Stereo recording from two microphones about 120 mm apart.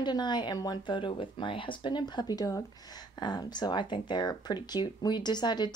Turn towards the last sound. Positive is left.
turn(degrees=35)  # may be behind; listen again after turning